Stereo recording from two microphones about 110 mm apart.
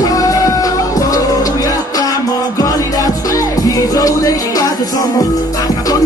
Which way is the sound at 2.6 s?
35° left (ahead or behind).